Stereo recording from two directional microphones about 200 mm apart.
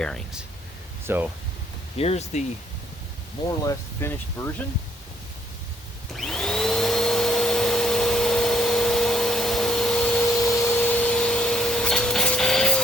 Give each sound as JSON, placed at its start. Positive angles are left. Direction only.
{"t": 0.0, "sound": "speech", "side_deg": 5}
{"t": 1.0, "sound": "speech", "side_deg": -10}
{"t": 2.0, "sound": "speech", "side_deg": 30}
{"t": 3.6, "sound": "speech", "side_deg": 15}
{"t": 6.1, "sound": "vacuum cleaner", "side_deg": 5}